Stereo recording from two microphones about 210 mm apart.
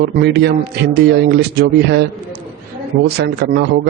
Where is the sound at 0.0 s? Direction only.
50° right (ahead or behind).